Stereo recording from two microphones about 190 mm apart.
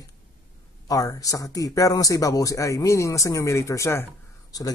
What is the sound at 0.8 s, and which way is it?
Speech, 20° left (ahead or behind).